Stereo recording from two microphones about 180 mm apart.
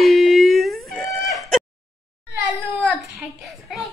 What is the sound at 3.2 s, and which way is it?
Speech, centre (ahead or behind).